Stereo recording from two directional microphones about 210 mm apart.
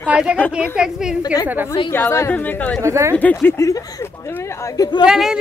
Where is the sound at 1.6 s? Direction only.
20° left (ahead or behind).